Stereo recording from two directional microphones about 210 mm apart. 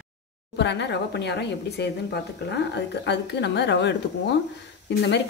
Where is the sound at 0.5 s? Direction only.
55° left (ahead or behind).